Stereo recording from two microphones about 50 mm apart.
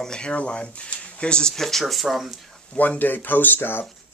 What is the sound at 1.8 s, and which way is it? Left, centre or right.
Speech, centre.